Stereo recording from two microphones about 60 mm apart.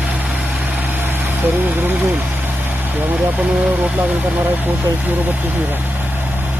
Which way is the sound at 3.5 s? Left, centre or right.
Centre.